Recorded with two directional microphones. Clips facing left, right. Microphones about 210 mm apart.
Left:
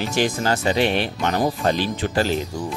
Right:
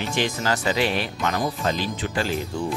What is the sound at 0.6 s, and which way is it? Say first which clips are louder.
Speech: left 4 dB; 25° left (ahead or behind).